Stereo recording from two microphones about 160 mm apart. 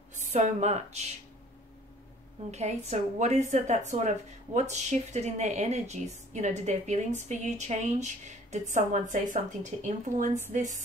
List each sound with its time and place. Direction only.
0.1 s speech: 50° right (ahead or behind)
2.5 s a woman's voice: 45° right (ahead or behind)